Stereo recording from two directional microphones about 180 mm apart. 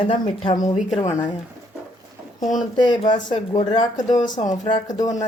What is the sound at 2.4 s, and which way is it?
Speech, 45° left (ahead or behind).